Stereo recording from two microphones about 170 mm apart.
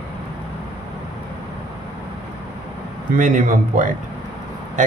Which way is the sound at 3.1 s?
50° right (ahead or behind).